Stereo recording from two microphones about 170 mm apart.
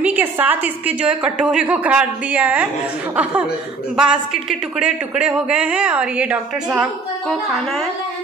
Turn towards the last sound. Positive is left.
turn(degrees=0)  # may be behind; listen again after turning